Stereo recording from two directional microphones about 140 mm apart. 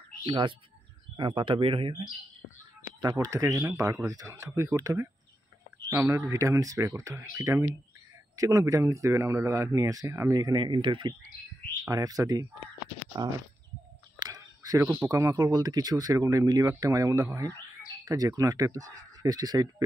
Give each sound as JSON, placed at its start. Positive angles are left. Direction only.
{"t": 0.2, "sound": "speech", "side_deg": -35}
{"t": 3.0, "sound": "speech", "side_deg": -25}
{"t": 14.2, "sound": "a sound", "side_deg": -25}
{"t": 14.8, "sound": "speech", "side_deg": -15}
{"t": 15.1, "sound": "speech", "side_deg": -25}